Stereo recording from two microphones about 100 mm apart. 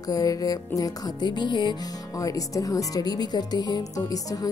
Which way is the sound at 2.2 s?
35° left (ahead or behind).